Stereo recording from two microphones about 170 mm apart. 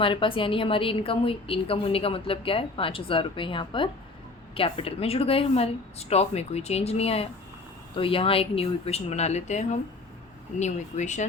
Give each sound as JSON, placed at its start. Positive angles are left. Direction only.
{"t": 0.0, "sound": "a woman's voice", "side_deg": 30}